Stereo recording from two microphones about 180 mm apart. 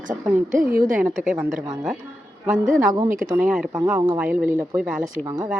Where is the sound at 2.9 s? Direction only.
20° right (ahead or behind).